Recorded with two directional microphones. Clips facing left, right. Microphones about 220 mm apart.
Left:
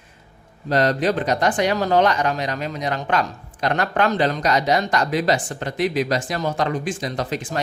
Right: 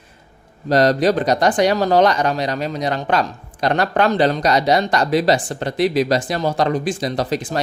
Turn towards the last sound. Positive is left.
turn(degrees=-35)  # may be behind; listen again after turning